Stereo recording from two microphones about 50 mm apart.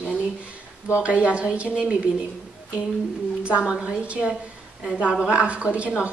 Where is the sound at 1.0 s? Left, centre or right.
Right.